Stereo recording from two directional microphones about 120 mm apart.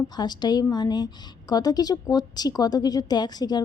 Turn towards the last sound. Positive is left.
turn(degrees=35)  # may be behind; listen again after turning